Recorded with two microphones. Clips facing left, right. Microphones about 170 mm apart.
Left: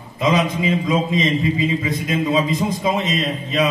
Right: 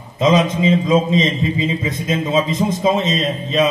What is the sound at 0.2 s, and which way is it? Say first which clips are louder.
A man's voice: right 4 dB; 25° right (ahead or behind).